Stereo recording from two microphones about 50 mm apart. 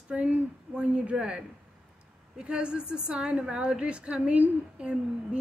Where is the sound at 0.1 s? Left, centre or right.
Right.